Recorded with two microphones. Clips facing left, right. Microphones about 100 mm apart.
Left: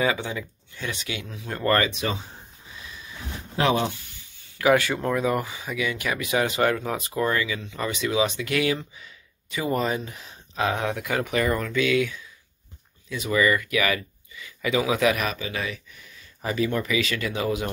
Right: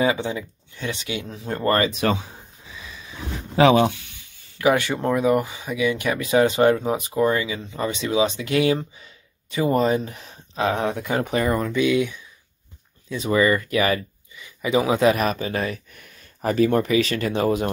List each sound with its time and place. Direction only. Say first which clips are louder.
0.0 s speech: right 3 dB; 25° right (ahead or behind)
3.5 s speech: right 7 dB; 80° right
4.6 s speech: right 1 dB; 25° right (ahead or behind); by 17.6 s 40° right (ahead or behind)